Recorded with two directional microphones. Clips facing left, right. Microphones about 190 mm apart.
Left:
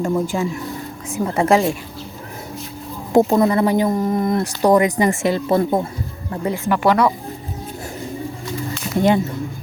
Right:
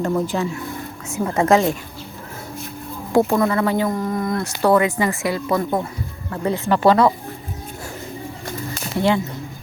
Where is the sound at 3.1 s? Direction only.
20° left (ahead or behind).